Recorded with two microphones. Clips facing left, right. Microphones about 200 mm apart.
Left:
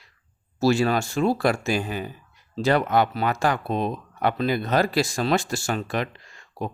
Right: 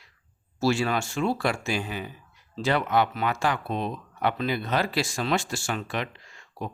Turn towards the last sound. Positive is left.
turn(degrees=40)  # may be behind; listen again after turning